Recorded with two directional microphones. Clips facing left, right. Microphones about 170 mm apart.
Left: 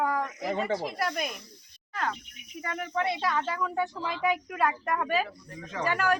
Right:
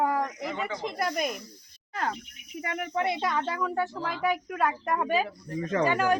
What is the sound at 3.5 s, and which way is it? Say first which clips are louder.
Speech: right 1 dB; 10° right (ahead or behind).